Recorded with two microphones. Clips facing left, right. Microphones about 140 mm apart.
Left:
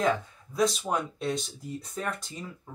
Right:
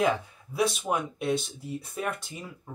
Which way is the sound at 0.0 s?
5° right (ahead or behind).